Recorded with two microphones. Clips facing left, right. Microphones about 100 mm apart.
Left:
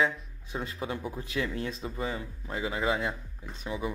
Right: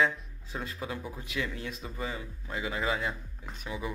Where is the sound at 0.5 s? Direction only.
25° left (ahead or behind).